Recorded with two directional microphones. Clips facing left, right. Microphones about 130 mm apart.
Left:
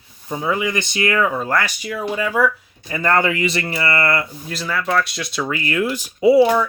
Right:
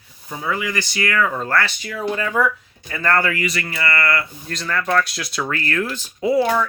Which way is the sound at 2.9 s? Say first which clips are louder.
Left 2 dB; 20° left (ahead or behind).